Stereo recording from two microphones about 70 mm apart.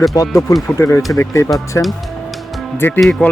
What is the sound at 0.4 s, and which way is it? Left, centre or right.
Speech, left.